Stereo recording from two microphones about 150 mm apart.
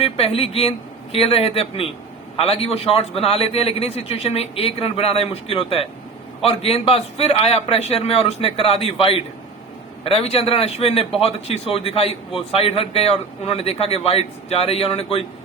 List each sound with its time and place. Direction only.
0.0 s a man's voice: 40° left (ahead or behind)